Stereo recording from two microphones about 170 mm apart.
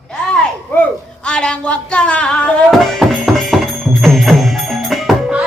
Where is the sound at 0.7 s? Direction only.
10° left (ahead or behind).